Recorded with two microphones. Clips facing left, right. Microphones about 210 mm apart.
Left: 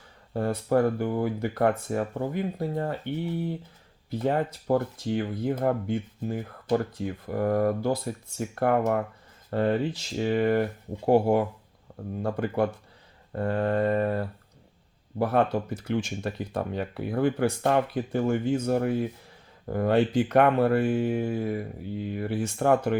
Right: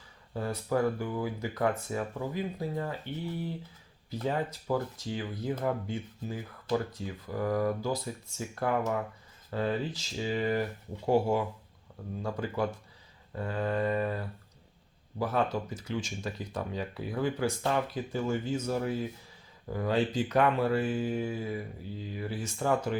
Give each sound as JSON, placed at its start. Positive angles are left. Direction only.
{"t": 0.3, "sound": "speech", "side_deg": 55}
{"t": 4.3, "sound": "speech", "side_deg": 55}